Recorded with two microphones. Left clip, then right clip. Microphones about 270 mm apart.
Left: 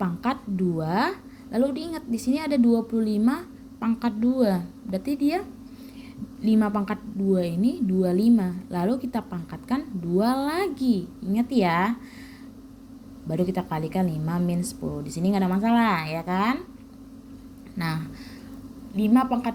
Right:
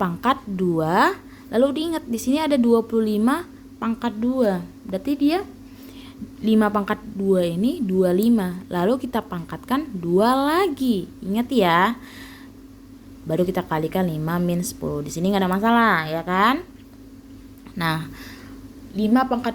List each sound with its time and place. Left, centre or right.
0.0 s a woman's voice: right
6.4 s a woman's voice: right
13.2 s a woman's voice: right
17.7 s a woman's voice: right